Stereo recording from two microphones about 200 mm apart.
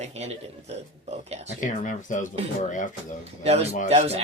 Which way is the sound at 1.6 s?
40° left (ahead or behind).